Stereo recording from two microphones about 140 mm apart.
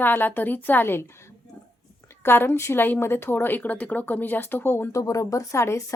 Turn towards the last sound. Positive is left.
turn(degrees=20)  # may be behind; listen again after turning